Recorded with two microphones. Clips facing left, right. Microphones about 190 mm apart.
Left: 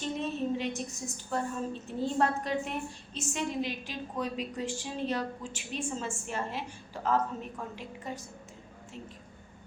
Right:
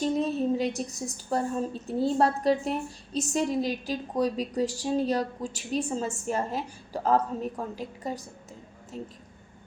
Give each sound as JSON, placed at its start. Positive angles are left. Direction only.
{"t": 0.0, "sound": "a woman's voice", "side_deg": -35}